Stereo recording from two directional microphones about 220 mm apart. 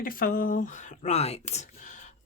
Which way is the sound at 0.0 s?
40° left (ahead or behind).